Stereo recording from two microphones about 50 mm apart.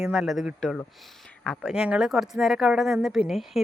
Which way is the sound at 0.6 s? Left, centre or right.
Centre.